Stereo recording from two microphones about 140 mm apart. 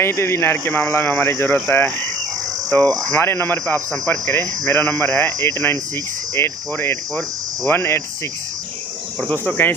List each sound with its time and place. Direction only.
0.0 s speech: 20° left (ahead or behind)
2.6 s cricket: 15° left (ahead or behind)
3.1 s speech: 15° left (ahead or behind)
7.2 s cricket: 5° left (ahead or behind)
7.8 s speech: 20° left (ahead or behind)
9.2 s speech: 10° left (ahead or behind)